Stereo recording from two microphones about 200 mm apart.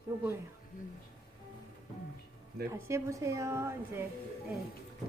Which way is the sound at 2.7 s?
15° right (ahead or behind).